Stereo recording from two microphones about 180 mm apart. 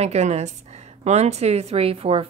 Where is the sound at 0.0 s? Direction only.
40° right (ahead or behind).